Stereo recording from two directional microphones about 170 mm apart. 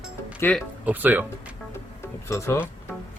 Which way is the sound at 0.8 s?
10° right (ahead or behind).